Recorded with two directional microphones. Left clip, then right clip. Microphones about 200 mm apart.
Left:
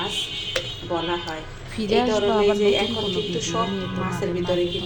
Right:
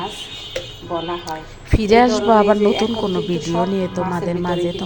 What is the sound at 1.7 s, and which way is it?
Speech, 35° right (ahead or behind).